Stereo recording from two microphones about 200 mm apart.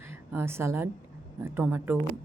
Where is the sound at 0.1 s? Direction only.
10° right (ahead or behind).